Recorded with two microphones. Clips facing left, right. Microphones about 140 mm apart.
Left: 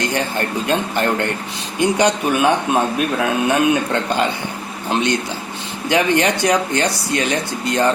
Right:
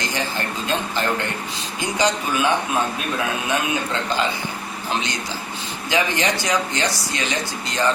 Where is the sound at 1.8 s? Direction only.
65° left (ahead or behind).